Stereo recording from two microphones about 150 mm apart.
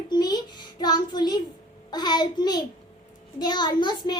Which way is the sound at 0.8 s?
30° left (ahead or behind).